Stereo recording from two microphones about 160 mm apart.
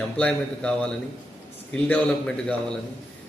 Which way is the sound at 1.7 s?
10° left (ahead or behind).